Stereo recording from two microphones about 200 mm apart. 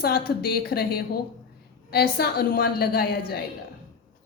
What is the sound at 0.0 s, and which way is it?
A woman's voice, 50° left (ahead or behind).